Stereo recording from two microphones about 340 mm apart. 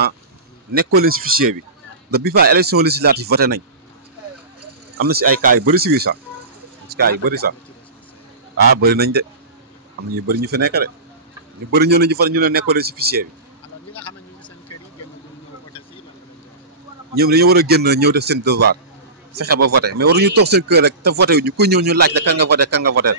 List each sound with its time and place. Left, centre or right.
0.8 s a man's voice: right
5.0 s a man's voice: right
8.8 s a man's voice: right
17.1 s a man's voice: right